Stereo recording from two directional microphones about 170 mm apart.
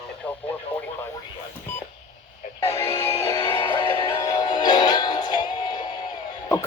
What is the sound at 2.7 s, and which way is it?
Music, 15° left (ahead or behind).